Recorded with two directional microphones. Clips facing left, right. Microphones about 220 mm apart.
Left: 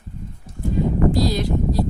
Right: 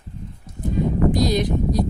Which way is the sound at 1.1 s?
20° right (ahead or behind).